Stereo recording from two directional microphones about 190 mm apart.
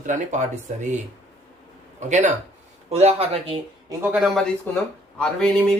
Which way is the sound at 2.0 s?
40° right (ahead or behind).